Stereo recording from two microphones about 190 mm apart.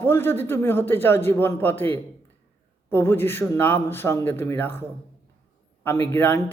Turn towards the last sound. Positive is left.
turn(degrees=10)  # may be behind; listen again after turning